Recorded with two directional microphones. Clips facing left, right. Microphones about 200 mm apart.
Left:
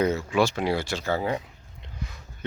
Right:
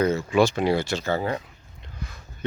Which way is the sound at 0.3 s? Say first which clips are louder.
Right 3 dB; 5° left (ahead or behind).